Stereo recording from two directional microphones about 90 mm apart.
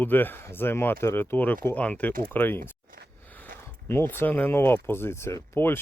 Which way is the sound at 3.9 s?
25° left (ahead or behind).